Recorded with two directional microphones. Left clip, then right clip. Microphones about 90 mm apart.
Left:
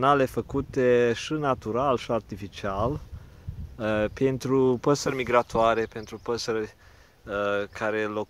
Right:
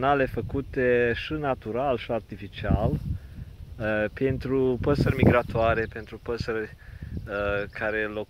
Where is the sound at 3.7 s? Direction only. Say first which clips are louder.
Even; 45° left (ahead or behind); by 8.3 s 60° left (ahead or behind).